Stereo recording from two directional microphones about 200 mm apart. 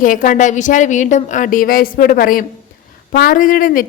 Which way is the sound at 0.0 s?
40° left (ahead or behind).